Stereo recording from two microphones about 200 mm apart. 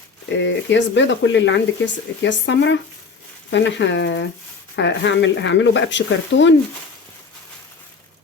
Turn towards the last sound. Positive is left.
turn(degrees=65)  # may be behind; listen again after turning